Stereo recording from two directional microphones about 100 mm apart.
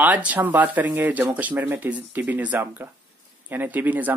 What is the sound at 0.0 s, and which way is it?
Speech, 15° right (ahead or behind).